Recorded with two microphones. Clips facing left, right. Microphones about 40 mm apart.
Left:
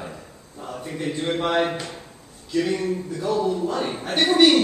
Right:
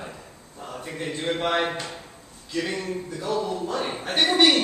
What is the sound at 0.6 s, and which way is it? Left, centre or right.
Speech, centre.